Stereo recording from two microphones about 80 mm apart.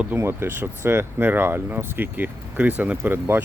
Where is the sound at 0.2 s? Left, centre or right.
Right.